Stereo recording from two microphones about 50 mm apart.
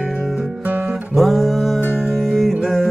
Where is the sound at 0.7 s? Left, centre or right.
Right.